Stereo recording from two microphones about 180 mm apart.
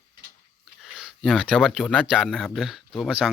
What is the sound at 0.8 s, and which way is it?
Speech, centre (ahead or behind).